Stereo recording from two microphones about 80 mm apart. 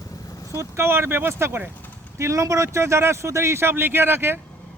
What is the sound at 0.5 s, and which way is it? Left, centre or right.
Speech, right.